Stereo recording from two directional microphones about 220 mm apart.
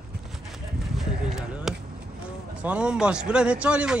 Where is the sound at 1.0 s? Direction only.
Centre (ahead or behind).